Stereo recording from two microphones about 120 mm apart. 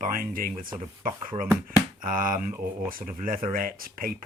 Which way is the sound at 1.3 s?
50° right (ahead or behind).